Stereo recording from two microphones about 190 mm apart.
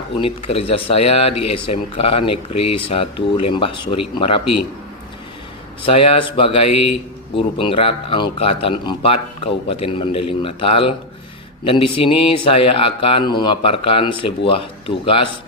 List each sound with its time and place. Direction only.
0.2 s a man's voice: 30° left (ahead or behind)
5.9 s a man's voice: 30° left (ahead or behind)